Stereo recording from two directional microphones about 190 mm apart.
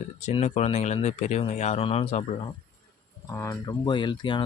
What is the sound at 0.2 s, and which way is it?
Speech, 35° left (ahead or behind).